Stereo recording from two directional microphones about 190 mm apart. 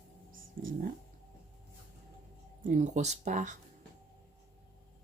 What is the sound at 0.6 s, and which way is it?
Speech, 50° right (ahead or behind).